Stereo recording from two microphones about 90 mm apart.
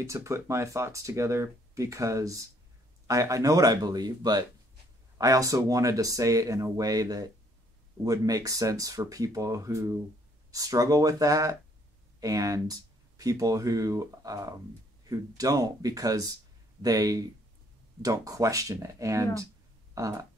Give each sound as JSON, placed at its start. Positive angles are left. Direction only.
{"t": 0.0, "sound": "speech", "side_deg": -35}
{"t": 5.1, "sound": "speech", "side_deg": -40}